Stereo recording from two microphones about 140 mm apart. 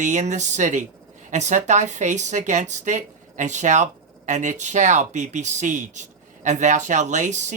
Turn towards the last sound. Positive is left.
turn(degrees=-60)  # may be behind; listen again after turning